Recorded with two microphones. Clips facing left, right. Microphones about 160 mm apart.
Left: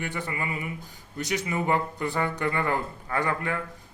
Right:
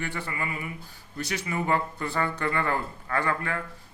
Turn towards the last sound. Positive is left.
turn(degrees=15)  # may be behind; listen again after turning